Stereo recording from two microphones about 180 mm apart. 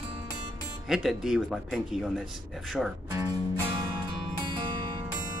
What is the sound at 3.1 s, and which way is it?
Speech, 20° right (ahead or behind).